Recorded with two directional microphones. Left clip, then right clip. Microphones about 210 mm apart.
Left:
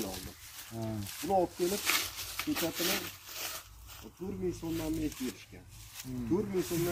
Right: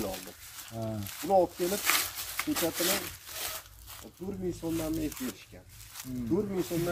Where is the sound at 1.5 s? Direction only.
15° right (ahead or behind).